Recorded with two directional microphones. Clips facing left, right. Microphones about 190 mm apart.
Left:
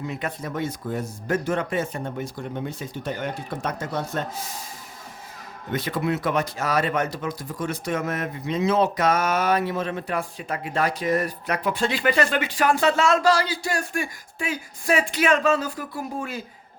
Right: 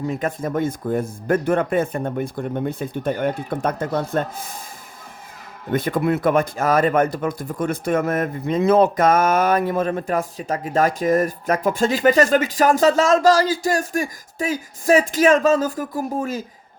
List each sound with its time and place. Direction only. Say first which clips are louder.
0.0 s speech: right 6 dB; 45° right (ahead or behind)
5.7 s speech: right 5 dB; 55° right (ahead or behind)